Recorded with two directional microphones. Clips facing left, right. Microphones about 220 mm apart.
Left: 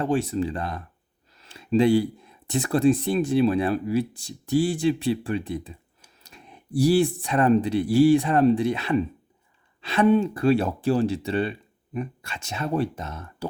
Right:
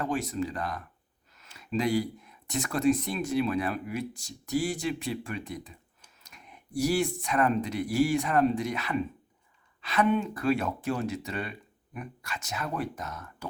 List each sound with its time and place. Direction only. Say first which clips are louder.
0.0 s speech: left 6 dB; 30° left (ahead or behind)